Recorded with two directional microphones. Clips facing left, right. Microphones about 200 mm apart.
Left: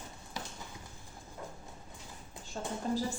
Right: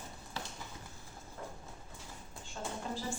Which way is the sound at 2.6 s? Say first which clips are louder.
Left 3 dB; 35° left (ahead or behind).